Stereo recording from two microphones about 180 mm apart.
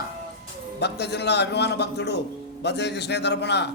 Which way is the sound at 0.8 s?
70° left (ahead or behind).